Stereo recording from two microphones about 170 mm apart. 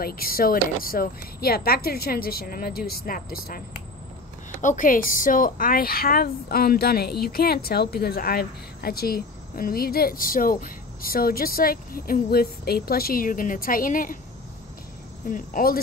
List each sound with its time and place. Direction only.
0.0 s a woman's voice: 60° left (ahead or behind)
4.6 s a woman's voice: 50° left (ahead or behind)
15.2 s a woman's voice: 55° left (ahead or behind)